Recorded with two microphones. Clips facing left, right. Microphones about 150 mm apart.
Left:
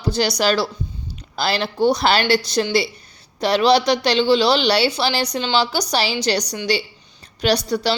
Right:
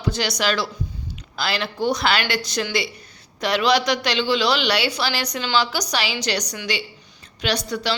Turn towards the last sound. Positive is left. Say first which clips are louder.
# left 5 dB
turn(degrees=35)  # may be behind; listen again after turning